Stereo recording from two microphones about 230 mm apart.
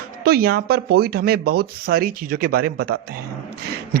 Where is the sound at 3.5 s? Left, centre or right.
Right.